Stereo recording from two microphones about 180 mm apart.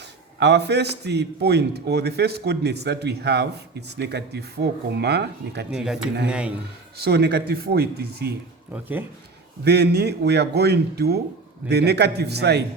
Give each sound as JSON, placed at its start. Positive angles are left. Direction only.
{"t": 0.0, "sound": "a man's voice", "side_deg": -70}
{"t": 5.7, "sound": "speech", "side_deg": -5}
{"t": 6.9, "sound": "a man's voice", "side_deg": -60}
{"t": 8.7, "sound": "speech", "side_deg": -10}
{"t": 9.6, "sound": "a man's voice", "side_deg": -65}